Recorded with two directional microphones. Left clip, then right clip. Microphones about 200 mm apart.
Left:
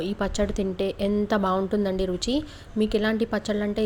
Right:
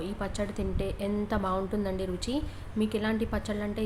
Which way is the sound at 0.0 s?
30° left (ahead or behind).